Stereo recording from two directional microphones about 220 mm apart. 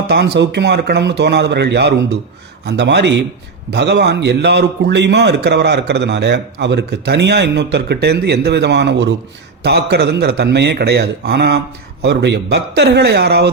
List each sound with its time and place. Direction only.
0.1 s a man's voice: 50° right (ahead or behind)